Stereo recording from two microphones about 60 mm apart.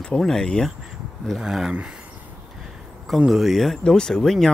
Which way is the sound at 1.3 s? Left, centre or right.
Centre.